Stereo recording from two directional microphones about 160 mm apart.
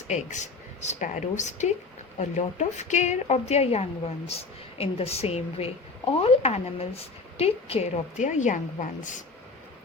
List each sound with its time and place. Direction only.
0.1 s a woman's voice: 50° left (ahead or behind)